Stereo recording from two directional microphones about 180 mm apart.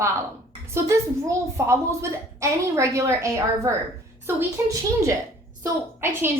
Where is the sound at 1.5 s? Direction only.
15° right (ahead or behind).